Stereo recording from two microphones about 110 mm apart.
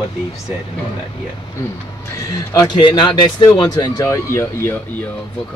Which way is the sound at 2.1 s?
30° left (ahead or behind).